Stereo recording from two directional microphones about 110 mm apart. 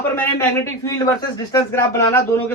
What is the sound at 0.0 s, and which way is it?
Speech, 20° left (ahead or behind).